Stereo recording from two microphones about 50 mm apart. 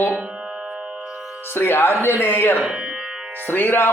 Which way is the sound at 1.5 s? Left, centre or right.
Left.